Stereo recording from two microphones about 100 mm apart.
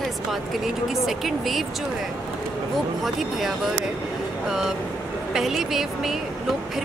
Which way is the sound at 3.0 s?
Centre (ahead or behind).